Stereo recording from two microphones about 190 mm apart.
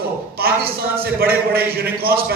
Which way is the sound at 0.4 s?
55° right (ahead or behind).